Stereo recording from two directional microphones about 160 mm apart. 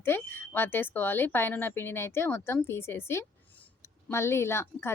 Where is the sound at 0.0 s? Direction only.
15° left (ahead or behind).